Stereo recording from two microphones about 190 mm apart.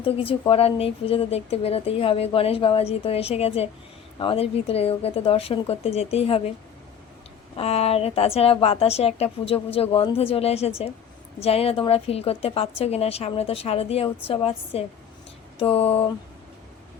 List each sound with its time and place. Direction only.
0.0 s speech: 30° left (ahead or behind)
7.5 s speech: 30° left (ahead or behind)